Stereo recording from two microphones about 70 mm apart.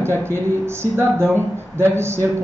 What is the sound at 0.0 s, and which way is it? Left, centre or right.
A woman's voice, right.